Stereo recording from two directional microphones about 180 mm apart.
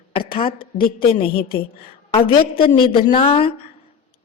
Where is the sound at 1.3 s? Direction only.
55° left (ahead or behind).